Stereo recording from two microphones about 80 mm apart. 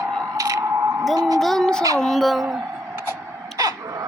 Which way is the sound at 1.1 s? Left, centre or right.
Right.